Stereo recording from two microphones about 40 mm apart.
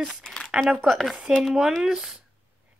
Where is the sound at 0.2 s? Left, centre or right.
Centre.